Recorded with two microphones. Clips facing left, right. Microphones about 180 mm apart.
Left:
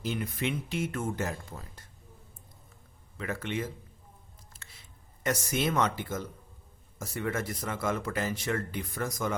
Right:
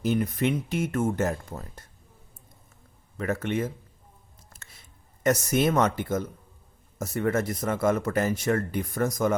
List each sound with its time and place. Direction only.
0.0 s speech: 45° right (ahead or behind)
3.2 s speech: 45° right (ahead or behind)
4.5 s a sound: 45° right (ahead or behind)
5.2 s speech: 45° right (ahead or behind)